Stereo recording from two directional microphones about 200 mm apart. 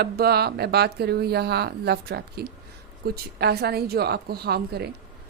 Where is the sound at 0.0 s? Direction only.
50° right (ahead or behind).